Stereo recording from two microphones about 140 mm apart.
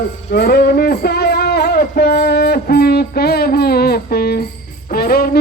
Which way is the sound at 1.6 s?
90° left.